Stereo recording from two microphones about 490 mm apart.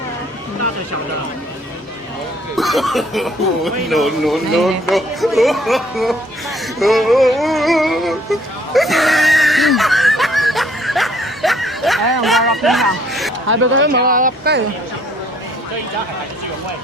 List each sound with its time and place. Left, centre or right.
2.6 s speech: centre
6.7 s a sound: centre
12.2 s speech: centre
13.5 s speech: right